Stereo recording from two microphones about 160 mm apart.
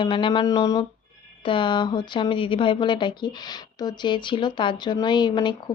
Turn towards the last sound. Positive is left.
turn(degrees=30)  # may be behind; listen again after turning